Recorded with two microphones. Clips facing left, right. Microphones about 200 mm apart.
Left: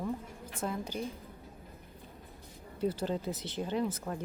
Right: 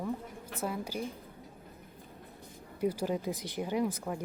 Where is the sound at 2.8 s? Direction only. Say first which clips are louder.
Right 1 dB; 10° right (ahead or behind).